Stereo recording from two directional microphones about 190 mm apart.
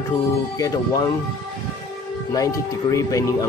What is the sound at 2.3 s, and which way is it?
Speech, 20° left (ahead or behind).